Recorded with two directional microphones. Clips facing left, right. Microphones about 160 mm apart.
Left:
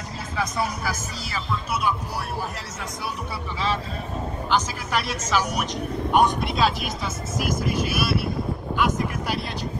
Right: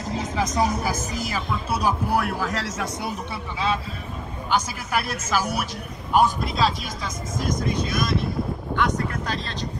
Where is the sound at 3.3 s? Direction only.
15° right (ahead or behind); by 6.7 s centre (ahead or behind).